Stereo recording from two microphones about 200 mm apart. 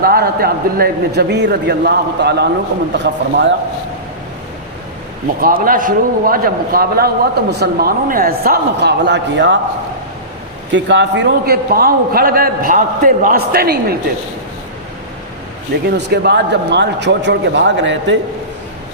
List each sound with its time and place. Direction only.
0.0 s a man's voice: 50° right (ahead or behind)
5.4 s a man's voice: 45° right (ahead or behind); by 9.6 s 60° right (ahead or behind)
10.7 s a man's voice: 65° right (ahead or behind)
16.0 s a man's voice: 55° right (ahead or behind)